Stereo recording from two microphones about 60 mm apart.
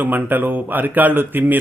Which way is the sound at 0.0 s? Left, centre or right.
Right.